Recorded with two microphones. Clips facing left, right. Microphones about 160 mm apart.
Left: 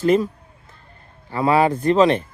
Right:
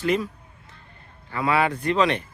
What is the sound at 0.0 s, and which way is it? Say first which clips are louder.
Speech: left 7 dB; 40° left (ahead or behind).